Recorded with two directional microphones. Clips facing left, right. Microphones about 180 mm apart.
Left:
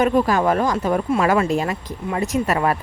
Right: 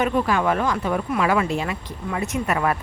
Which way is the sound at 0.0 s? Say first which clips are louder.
Left 4 dB; 40° left (ahead or behind).